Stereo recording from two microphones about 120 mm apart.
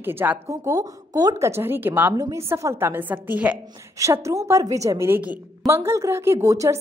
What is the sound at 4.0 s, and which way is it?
A woman's voice, 25° right (ahead or behind).